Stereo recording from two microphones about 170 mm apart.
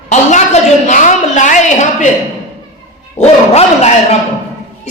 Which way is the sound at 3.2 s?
40° left (ahead or behind).